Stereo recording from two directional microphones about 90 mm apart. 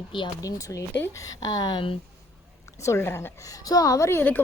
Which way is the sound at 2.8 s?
30° left (ahead or behind).